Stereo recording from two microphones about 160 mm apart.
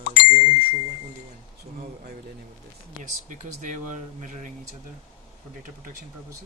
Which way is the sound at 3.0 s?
55° right (ahead or behind).